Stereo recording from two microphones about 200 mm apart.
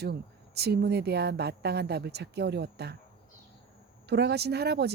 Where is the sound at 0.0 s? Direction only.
55° right (ahead or behind).